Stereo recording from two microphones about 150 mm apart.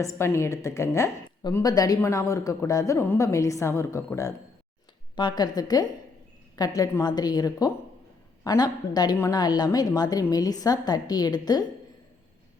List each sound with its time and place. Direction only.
0.0 s a woman's voice: 20° left (ahead or behind)